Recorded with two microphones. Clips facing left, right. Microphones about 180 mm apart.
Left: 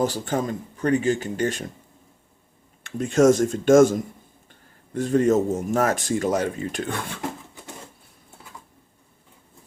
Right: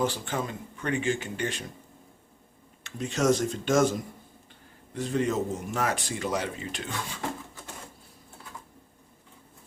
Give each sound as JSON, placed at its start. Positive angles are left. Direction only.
{"t": 0.0, "sound": "speech", "side_deg": 40}
{"t": 2.8, "sound": "speech", "side_deg": 50}